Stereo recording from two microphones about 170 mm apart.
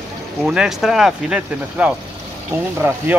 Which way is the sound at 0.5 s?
5° right (ahead or behind).